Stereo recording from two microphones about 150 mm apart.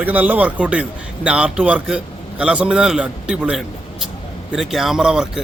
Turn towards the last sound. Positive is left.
turn(degrees=-5)  # may be behind; listen again after turning